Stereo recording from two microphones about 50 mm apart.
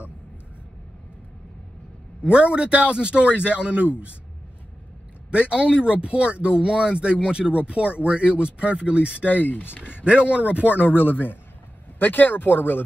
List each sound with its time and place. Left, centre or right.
2.2 s speech: right
5.3 s speech: right
9.2 s speech: left
10.0 s speech: right
10.9 s speech: left